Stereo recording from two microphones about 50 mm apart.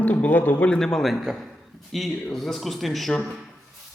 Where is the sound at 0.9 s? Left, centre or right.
Centre.